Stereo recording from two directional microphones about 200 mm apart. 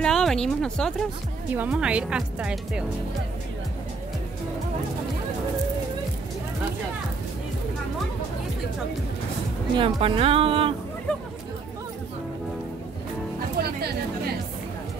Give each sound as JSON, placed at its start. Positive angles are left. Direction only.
{"t": 0.0, "sound": "speech", "side_deg": 0}
{"t": 9.8, "sound": "speech", "side_deg": -25}
{"t": 13.6, "sound": "music", "side_deg": -50}